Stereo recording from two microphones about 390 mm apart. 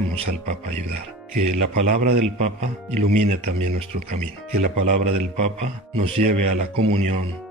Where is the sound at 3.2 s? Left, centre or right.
Centre.